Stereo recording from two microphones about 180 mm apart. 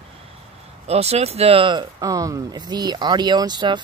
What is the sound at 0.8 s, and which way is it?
Speech, 35° right (ahead or behind).